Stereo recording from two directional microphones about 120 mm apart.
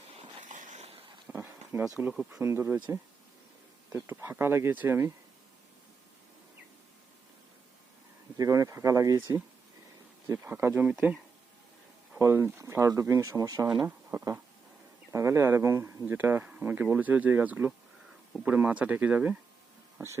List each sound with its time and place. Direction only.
0.4 s a sound: 90° right; by 1.0 s 60° right (ahead or behind)
1.3 s a sound: 15° right (ahead or behind)
2.0 s speech: 20° right (ahead or behind)
8.4 s speech: 30° right (ahead or behind)
10.4 s speech: 20° right (ahead or behind)
12.2 s speech: 20° right (ahead or behind)